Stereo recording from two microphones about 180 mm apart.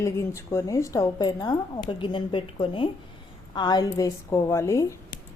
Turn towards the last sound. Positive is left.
turn(degrees=15)  # may be behind; listen again after turning